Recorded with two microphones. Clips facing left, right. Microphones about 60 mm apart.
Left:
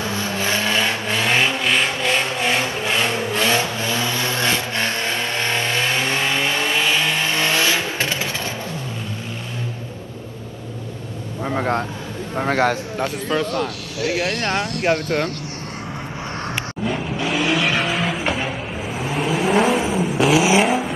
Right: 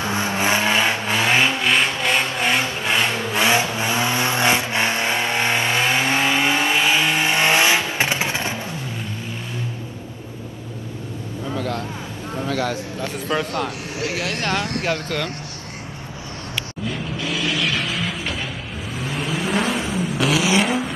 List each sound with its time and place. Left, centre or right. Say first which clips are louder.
0.0 s vehicle: right 2 dB; right
1.0 s vehicle: right 1 dB; centre
3.3 s vehicle: right 3 dB; centre
11.4 s vehicle: left 5 dB; left
12.4 s a sound: left 5 dB; left
13.3 s speech: right 1 dB; right
14.4 s speech: left 2 dB; left
17.5 s vehicle: left 3 dB; centre
19.0 s vehicle: left 4 dB; centre
20.3 s vehicle: left 3 dB; centre